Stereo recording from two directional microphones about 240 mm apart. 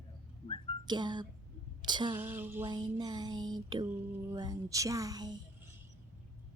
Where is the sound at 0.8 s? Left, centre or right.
Centre.